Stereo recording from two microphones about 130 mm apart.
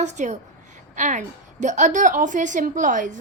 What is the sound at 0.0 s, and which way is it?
A woman's voice, 65° right (ahead or behind).